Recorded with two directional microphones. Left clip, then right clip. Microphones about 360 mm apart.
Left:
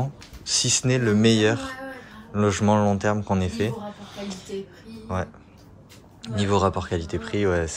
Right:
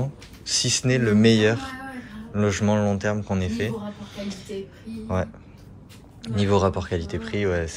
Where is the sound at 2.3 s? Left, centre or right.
Centre.